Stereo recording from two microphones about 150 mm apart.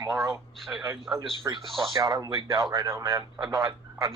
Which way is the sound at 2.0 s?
20° right (ahead or behind).